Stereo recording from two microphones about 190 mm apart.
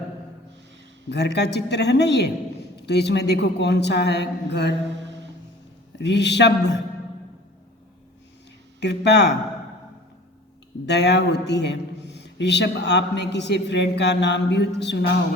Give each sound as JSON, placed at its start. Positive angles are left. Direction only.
{"t": 1.1, "sound": "a man's voice", "side_deg": 60}
{"t": 6.0, "sound": "a man's voice", "side_deg": 65}
{"t": 8.8, "sound": "a man's voice", "side_deg": 65}
{"t": 10.8, "sound": "a man's voice", "side_deg": 65}